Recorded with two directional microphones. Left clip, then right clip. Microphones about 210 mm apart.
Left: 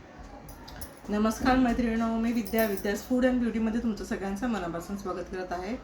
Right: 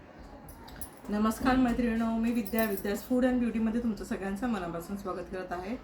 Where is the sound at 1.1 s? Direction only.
Centre (ahead or behind).